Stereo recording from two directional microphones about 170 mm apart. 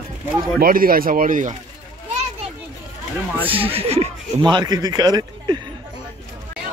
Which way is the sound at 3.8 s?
35° right (ahead or behind).